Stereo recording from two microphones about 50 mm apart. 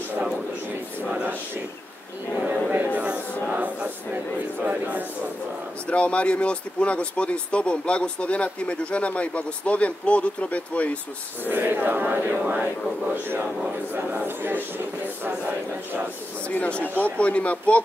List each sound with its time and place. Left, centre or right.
2.4 s speech: right
3.4 s a sound: right
5.9 s speech: left
11.4 s a sound: right
13.9 s speech: right
16.4 s speech: left
16.8 s speech: right
17.2 s speech: left